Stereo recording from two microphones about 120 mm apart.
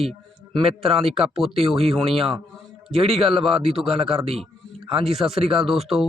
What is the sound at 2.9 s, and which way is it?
Speech, 55° right (ahead or behind).